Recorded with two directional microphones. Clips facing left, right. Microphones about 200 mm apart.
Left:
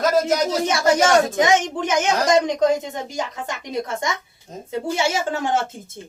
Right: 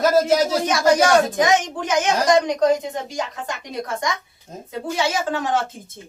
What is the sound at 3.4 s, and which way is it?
A woman's voice, 25° left (ahead or behind).